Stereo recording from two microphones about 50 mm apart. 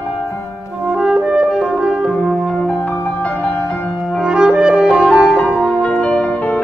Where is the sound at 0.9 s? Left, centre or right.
Centre.